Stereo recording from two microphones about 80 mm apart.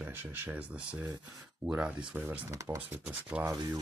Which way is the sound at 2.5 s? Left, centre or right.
Right.